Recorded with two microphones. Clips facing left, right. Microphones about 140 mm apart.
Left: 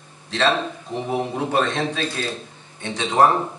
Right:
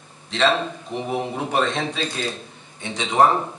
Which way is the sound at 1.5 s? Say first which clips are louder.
Even; 15° right (ahead or behind).